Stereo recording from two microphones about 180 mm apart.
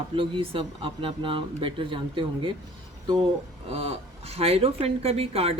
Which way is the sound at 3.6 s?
35° right (ahead or behind).